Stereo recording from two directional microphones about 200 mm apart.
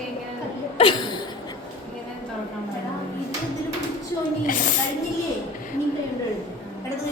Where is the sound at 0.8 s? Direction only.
25° left (ahead or behind).